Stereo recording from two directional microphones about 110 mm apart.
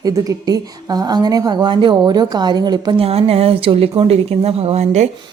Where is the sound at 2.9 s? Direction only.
60° right (ahead or behind); by 5.1 s 90° right.